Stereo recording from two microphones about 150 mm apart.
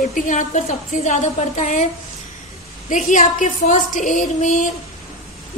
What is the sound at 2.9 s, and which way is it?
A woman's voice, 55° left (ahead or behind).